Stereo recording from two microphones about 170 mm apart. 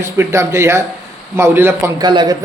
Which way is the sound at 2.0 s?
25° right (ahead or behind).